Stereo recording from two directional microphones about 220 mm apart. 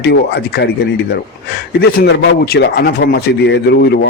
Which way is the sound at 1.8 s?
45° left (ahead or behind).